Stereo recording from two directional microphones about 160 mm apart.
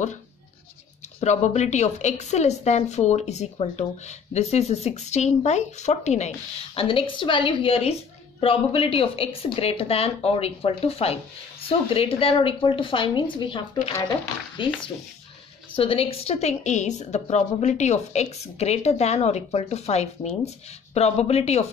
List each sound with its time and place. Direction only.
1.2 s a woman's voice: 45° left (ahead or behind); by 13.6 s 30° left (ahead or behind)
14.6 s a woman's voice: 30° left (ahead or behind)